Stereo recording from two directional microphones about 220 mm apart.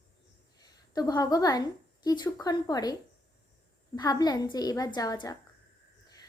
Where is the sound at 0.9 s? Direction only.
20° left (ahead or behind).